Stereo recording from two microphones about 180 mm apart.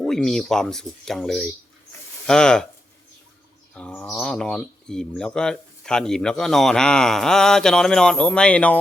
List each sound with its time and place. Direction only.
0.0 s speech: centre (ahead or behind)
3.8 s speech: 5° left (ahead or behind)